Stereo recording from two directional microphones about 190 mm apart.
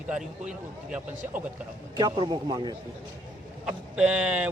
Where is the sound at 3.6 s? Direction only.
5° right (ahead or behind).